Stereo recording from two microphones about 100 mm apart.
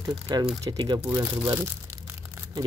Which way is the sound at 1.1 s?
30° right (ahead or behind).